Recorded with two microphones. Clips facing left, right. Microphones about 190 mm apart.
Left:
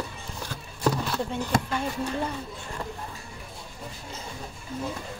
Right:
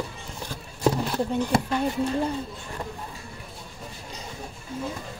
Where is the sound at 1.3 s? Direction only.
35° right (ahead or behind).